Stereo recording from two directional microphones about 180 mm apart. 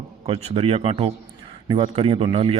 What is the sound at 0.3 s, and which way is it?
Speech, 35° right (ahead or behind).